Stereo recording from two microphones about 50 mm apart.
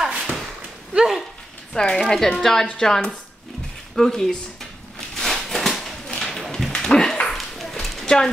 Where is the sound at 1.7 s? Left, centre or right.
Centre.